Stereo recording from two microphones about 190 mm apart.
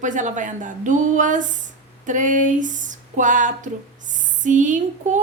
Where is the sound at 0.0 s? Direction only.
40° right (ahead or behind).